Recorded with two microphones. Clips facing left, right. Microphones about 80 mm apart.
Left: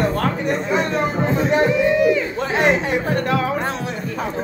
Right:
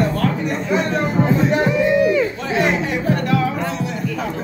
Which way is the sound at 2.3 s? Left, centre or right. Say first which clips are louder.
Left 1 dB; left.